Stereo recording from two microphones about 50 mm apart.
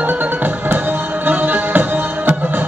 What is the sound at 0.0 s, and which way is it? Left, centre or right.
Music, right.